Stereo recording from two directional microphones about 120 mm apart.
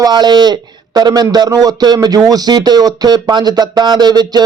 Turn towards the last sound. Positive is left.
turn(degrees=-35)  # may be behind; listen again after turning